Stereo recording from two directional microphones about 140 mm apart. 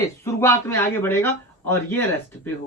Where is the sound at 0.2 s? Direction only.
20° left (ahead or behind).